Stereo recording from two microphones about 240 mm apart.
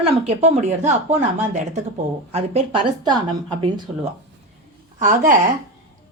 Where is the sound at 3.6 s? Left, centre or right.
Right.